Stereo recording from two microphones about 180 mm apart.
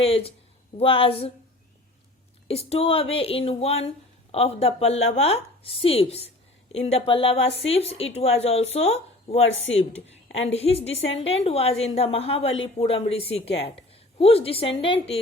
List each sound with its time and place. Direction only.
0.0 s speech: 35° left (ahead or behind)
2.5 s speech: 35° left (ahead or behind)
9.4 s a woman's voice: 90° left
10.5 s a woman's voice: 35° left (ahead or behind)